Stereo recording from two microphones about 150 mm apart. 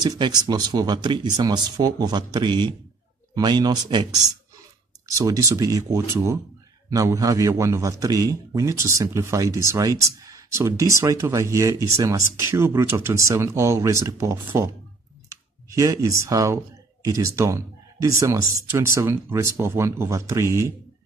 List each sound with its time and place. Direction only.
0.0 s speech: 30° right (ahead or behind)